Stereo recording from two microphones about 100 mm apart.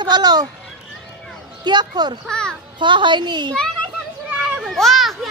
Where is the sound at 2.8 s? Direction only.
50° right (ahead or behind).